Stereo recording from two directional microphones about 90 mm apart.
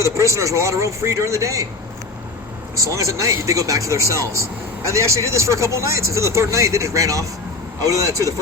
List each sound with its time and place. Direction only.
0.2 s speech: 35° right (ahead or behind)
2.7 s speech: 35° right (ahead or behind)